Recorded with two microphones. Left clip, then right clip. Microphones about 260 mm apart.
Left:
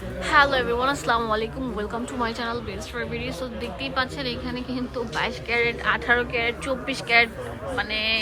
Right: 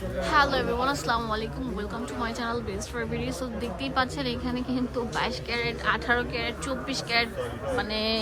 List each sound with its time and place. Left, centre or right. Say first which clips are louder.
0.2 s a woman's voice: left 4 dB; centre
3.9 s a woman's voice: left 1 dB; centre
7.8 s speech: left 5 dB; centre